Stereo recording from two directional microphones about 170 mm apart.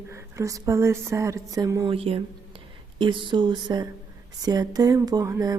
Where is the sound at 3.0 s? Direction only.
30° right (ahead or behind).